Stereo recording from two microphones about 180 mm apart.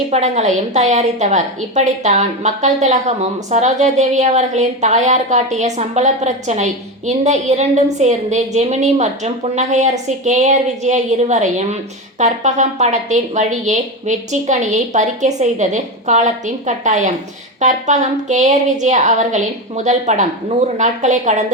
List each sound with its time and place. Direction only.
0.1 s a woman's voice: 40° right (ahead or behind)